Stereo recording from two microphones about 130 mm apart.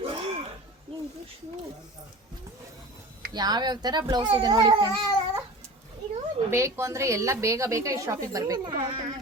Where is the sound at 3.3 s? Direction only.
35° right (ahead or behind).